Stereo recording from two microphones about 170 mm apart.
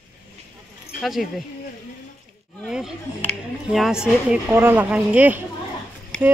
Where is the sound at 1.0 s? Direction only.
Centre (ahead or behind).